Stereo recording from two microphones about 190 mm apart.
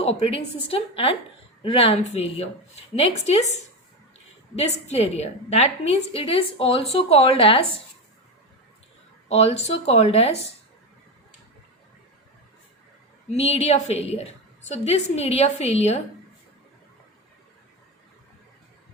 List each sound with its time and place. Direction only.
0.0 s a woman's voice: 30° left (ahead or behind)
9.3 s a woman's voice: 35° left (ahead or behind)
13.3 s a woman's voice: 35° left (ahead or behind)